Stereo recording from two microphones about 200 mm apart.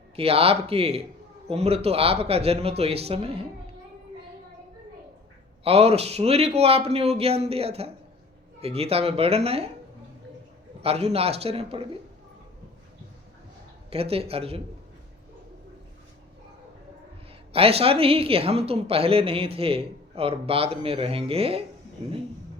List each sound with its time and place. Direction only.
0.2 s a woman's voice: 30° right (ahead or behind)
5.6 s speech: 30° right (ahead or behind)
10.8 s a woman's voice: 30° right (ahead or behind)
13.9 s a woman's voice: 30° right (ahead or behind)
17.5 s a woman's voice: 30° right (ahead or behind)